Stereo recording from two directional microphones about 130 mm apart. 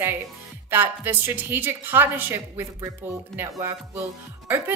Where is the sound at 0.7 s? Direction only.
15° right (ahead or behind).